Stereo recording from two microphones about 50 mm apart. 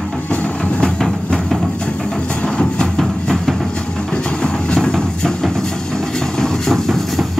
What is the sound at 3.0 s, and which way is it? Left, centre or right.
Music, centre.